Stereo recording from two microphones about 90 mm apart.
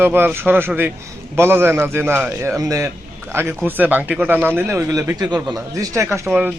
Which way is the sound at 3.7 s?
20° right (ahead or behind).